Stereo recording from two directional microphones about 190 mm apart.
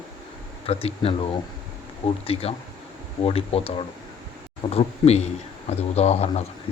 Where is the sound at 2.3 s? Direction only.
30° left (ahead or behind).